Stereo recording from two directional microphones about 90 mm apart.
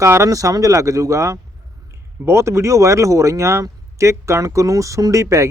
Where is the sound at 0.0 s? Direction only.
30° right (ahead or behind).